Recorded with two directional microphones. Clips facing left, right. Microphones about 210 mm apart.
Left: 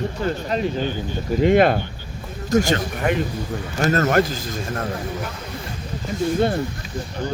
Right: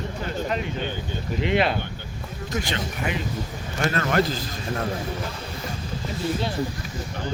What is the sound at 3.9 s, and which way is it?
Speech, 45° left (ahead or behind).